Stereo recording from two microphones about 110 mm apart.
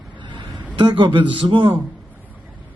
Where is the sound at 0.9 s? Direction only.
50° right (ahead or behind).